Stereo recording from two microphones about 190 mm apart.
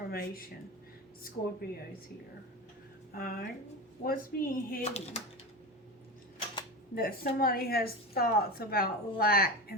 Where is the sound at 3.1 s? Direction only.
50° left (ahead or behind).